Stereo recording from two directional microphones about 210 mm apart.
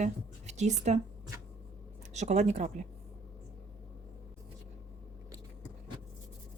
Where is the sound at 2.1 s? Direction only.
35° right (ahead or behind).